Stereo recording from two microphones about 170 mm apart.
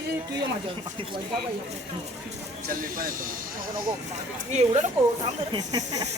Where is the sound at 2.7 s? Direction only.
55° right (ahead or behind).